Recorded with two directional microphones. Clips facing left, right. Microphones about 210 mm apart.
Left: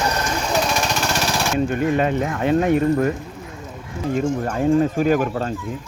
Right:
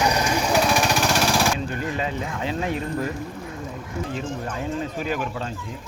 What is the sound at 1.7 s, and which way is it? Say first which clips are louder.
Speech: left 8 dB; 60° left (ahead or behind).